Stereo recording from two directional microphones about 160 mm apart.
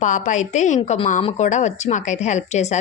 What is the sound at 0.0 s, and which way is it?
Speech, 50° left (ahead or behind).